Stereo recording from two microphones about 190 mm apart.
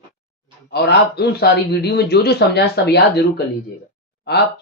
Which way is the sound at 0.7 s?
60° left (ahead or behind).